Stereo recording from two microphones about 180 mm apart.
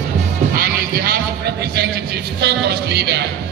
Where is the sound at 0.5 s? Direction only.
60° right (ahead or behind).